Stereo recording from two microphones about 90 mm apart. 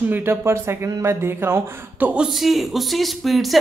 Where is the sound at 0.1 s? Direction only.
25° right (ahead or behind).